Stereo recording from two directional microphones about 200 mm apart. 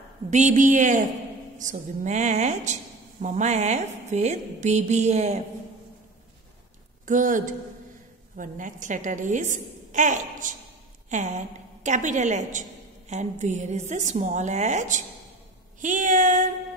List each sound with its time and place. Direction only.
0.3 s a woman's voice: 40° right (ahead or behind)
7.1 s a woman's voice: 40° right (ahead or behind)